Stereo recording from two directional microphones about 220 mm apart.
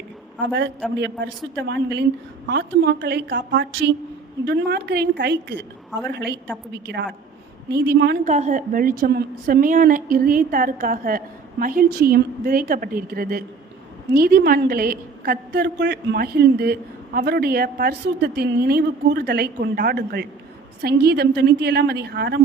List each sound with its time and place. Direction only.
0.3 s a woman's voice: 55° right (ahead or behind)
8.3 s a woman's voice: 30° right (ahead or behind); by 22.4 s 50° right (ahead or behind)